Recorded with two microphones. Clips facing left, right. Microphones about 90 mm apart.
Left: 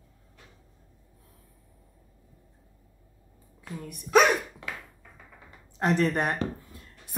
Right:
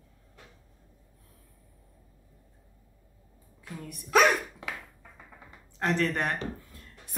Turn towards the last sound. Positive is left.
turn(degrees=15)  # may be behind; listen again after turning